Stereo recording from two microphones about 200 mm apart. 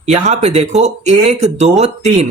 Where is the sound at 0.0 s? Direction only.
35° right (ahead or behind).